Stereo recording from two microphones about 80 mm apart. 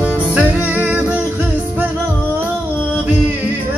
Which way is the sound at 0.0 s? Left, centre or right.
Centre.